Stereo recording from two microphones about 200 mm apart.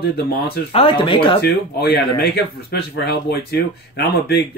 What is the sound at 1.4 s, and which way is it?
Speech, 50° left (ahead or behind).